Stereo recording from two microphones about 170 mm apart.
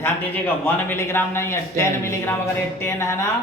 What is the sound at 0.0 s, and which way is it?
A man's voice, 10° left (ahead or behind).